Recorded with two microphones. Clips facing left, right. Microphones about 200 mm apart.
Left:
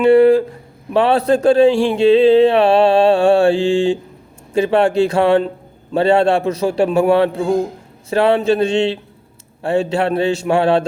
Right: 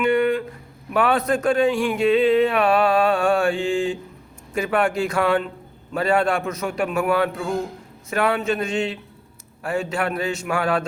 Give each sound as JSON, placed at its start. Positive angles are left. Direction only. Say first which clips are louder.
{"t": 0.0, "sound": "a man's voice", "louder": "left 10 dB", "side_deg": 30}